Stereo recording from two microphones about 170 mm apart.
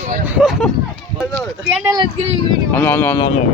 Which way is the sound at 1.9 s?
25° right (ahead or behind).